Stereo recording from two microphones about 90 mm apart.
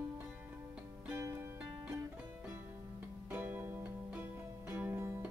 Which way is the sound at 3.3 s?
20° right (ahead or behind).